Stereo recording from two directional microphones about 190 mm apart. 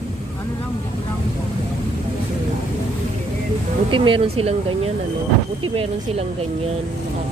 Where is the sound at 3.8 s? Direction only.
25° right (ahead or behind).